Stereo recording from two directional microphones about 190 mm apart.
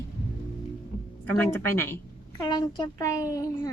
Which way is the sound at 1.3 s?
10° left (ahead or behind).